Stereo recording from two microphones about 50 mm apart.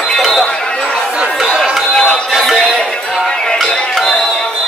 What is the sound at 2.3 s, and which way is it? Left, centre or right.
Music, centre.